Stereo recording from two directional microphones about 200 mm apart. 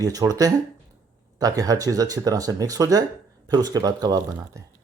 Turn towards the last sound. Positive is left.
turn(degrees=-20)  # may be behind; listen again after turning